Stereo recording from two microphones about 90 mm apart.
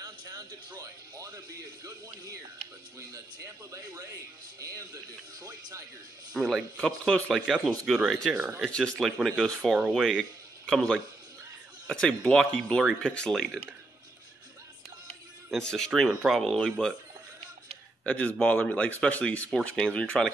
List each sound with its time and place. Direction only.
0.3 s speech: 40° right (ahead or behind)
3.0 s speech: 35° right (ahead or behind)
6.3 s speech: centre (ahead or behind)
6.8 s speech: 10° left (ahead or behind)
7.4 s speech: 5° right (ahead or behind)
15.5 s speech: 5° left (ahead or behind)
18.0 s speech: 15° left (ahead or behind)